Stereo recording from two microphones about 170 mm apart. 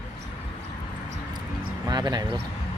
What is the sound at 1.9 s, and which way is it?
Speech, 25° right (ahead or behind).